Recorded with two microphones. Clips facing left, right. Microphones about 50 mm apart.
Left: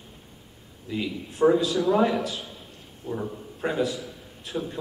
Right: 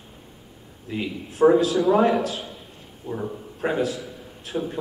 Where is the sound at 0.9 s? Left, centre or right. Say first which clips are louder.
Right 1 dB; centre.